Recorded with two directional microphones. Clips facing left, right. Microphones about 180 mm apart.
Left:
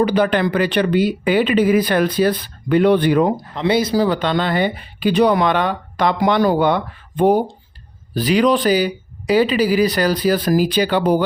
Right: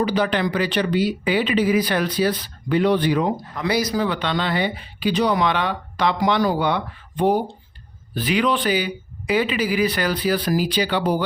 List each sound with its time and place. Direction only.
0.0 s speech: 55° left (ahead or behind)
3.5 s speech: 25° left (ahead or behind); by 7.4 s 50° left (ahead or behind)
8.1 s speech: 40° left (ahead or behind)